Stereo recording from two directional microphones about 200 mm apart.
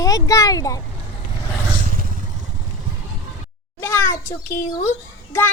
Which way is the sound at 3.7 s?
15° left (ahead or behind).